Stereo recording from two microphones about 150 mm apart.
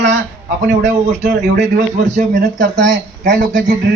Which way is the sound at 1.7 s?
60° right (ahead or behind).